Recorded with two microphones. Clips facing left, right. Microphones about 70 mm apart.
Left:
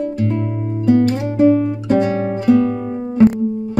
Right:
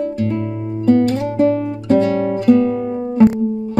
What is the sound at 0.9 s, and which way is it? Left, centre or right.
Music, centre.